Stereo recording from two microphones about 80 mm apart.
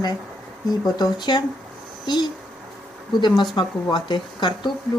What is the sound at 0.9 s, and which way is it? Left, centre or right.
Speech, left.